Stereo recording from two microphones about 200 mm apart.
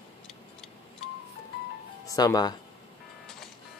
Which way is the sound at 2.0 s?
15° left (ahead or behind).